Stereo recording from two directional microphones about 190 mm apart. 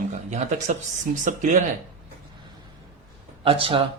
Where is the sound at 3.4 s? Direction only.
30° right (ahead or behind).